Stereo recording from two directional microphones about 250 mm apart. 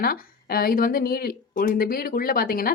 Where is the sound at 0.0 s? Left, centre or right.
Left.